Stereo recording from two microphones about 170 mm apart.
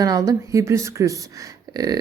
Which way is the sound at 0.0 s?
20° right (ahead or behind).